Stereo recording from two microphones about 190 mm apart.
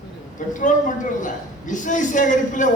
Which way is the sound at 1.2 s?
40° left (ahead or behind).